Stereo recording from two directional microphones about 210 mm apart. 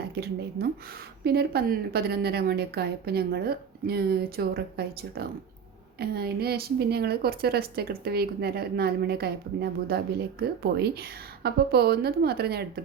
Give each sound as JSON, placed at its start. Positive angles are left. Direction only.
{"t": 0.6, "sound": "a woman's voice", "side_deg": -50}